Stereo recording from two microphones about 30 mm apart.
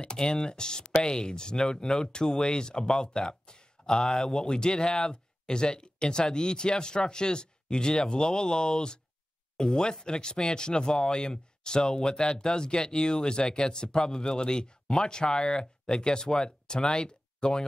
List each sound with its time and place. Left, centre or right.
0.1 s speech: left
4.0 s speech: centre; by 9.0 s left
9.6 s speech: centre
10.0 s speech: left